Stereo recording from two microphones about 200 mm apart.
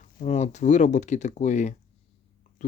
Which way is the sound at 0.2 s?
35° left (ahead or behind).